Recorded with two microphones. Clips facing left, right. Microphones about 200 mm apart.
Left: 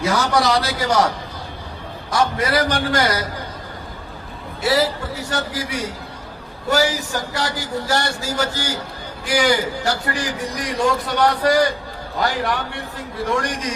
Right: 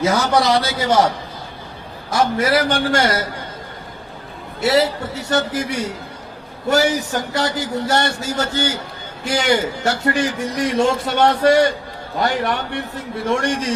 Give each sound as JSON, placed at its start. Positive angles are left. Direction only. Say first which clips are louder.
{"t": 0.0, "sound": "a man's voice", "louder": "right 2 dB", "side_deg": -20}
{"t": 4.6, "sound": "a man's voice", "louder": "right 2 dB", "side_deg": -20}
{"t": 12.5, "sound": "a man's voice", "louder": "right 2 dB", "side_deg": -20}